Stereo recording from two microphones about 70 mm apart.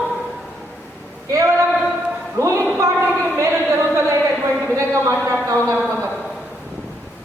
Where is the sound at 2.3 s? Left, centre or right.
Right.